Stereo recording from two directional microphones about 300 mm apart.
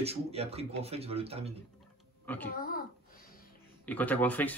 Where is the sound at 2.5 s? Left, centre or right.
Left.